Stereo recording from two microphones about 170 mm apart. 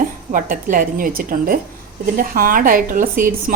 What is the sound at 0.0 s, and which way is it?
A woman's voice, 50° right (ahead or behind).